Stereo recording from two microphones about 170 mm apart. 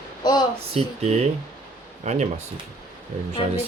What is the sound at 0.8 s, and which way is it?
Speech, 35° right (ahead or behind).